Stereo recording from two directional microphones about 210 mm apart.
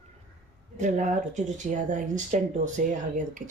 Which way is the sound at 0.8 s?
35° right (ahead or behind).